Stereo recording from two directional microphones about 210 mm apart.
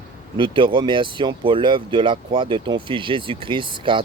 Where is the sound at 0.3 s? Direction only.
25° right (ahead or behind).